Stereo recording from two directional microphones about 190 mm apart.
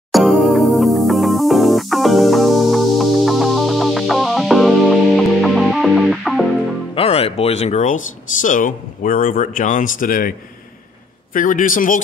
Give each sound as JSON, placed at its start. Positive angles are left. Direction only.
{"t": 0.1, "sound": "music", "side_deg": 0}
{"t": 7.0, "sound": "speech", "side_deg": 30}
{"t": 11.3, "sound": "speech", "side_deg": 45}